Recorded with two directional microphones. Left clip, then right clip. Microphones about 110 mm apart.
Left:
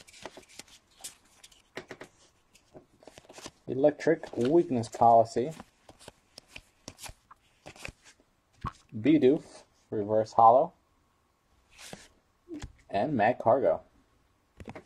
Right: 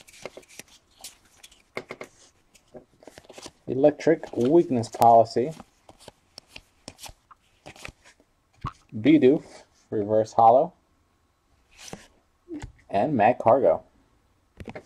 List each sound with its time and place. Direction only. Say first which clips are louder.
3.1 s shuffling cards: right 3 dB; 10° left (ahead or behind); by 4.2 s 5° right (ahead or behind)
4.3 s speech: right 5 dB; 5° left (ahead or behind)
6.0 s shuffling cards: right 4 dB; centre (ahead or behind)
8.0 s a sound: right 3 dB; 50° left (ahead or behind)
9.1 s speech: right 5 dB; 15° right (ahead or behind)
12.8 s speech: right 6 dB; 5° right (ahead or behind)